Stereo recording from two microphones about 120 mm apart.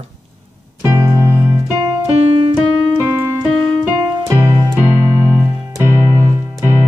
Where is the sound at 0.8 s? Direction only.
20° right (ahead or behind).